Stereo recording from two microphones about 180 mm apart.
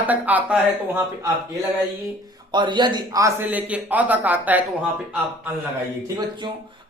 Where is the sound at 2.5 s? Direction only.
25° right (ahead or behind); by 4.9 s 10° right (ahead or behind).